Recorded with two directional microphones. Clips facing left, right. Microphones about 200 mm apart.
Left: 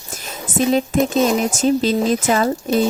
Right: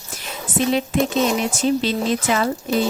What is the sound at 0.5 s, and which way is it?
Speech, 45° left (ahead or behind).